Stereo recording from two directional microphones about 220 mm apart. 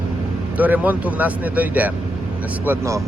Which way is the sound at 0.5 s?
5° right (ahead or behind).